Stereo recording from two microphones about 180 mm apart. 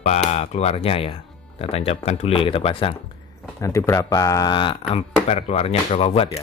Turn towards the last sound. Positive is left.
turn(degrees=35)  # may be behind; listen again after turning